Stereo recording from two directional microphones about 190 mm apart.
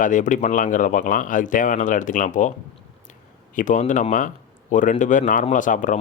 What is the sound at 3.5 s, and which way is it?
Speech, 40° left (ahead or behind).